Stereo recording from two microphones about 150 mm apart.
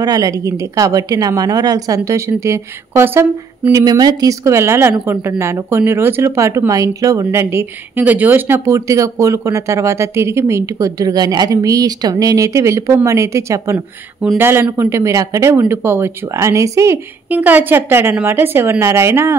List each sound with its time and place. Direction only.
0.0 s speech: 25° right (ahead or behind)